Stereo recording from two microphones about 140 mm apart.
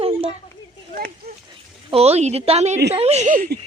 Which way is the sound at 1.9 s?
45° right (ahead or behind).